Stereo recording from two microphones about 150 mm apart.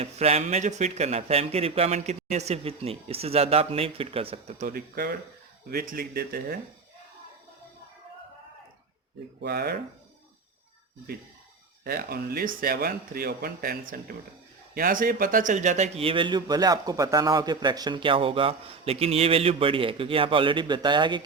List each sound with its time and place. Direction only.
0.0 s speech: 45° right (ahead or behind)
4.6 s speech: 85° right
5.7 s speech: 70° right (ahead or behind); by 6.6 s 90° right
9.5 s speech: 90° right
11.9 s speech: 90° right; by 21.2 s 30° right (ahead or behind)